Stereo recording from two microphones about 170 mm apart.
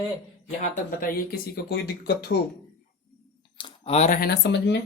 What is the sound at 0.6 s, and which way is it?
Speech, 55° left (ahead or behind).